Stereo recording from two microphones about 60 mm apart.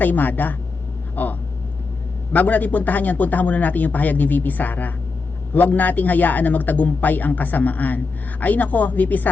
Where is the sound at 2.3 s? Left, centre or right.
Left.